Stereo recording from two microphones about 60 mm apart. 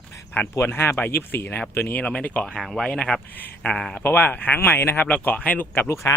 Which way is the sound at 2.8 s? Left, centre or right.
Centre.